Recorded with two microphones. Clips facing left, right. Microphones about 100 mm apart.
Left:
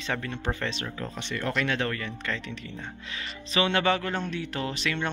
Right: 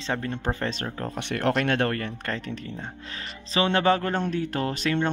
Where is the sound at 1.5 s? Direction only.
50° right (ahead or behind).